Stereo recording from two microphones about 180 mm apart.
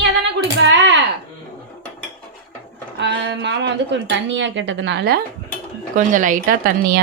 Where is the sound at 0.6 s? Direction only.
85° right.